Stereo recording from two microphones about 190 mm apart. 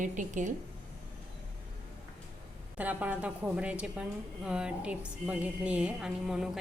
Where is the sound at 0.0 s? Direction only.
40° right (ahead or behind).